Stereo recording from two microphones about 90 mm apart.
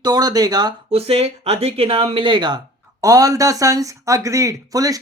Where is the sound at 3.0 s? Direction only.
40° right (ahead or behind).